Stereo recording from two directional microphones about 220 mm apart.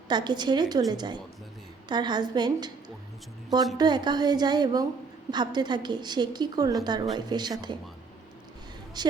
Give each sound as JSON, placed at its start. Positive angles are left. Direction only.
{"t": 0.1, "sound": "a woman's voice", "side_deg": -20}
{"t": 3.8, "sound": "a woman's voice", "side_deg": -20}
{"t": 9.0, "sound": "a woman's voice", "side_deg": -20}